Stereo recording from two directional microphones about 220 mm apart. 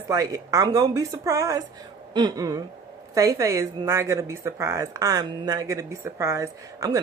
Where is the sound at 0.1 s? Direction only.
15° right (ahead or behind).